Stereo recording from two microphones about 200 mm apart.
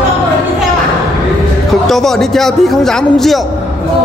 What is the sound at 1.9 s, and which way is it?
Mantra, centre (ahead or behind).